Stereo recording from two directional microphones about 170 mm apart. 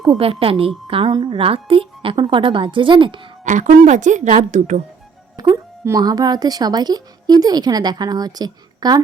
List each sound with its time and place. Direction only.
0.0 s a woman's voice: 35° right (ahead or behind)
3.4 s speech: 45° right (ahead or behind)
5.4 s speech: 20° right (ahead or behind)